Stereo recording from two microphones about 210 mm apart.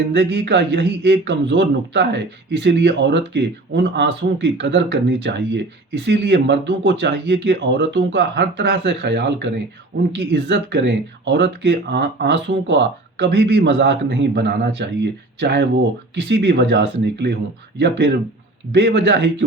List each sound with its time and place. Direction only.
0.1 s a man's voice: 55° right (ahead or behind)